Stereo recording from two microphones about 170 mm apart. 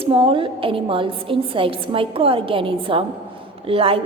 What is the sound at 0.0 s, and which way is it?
A woman's voice, 30° right (ahead or behind).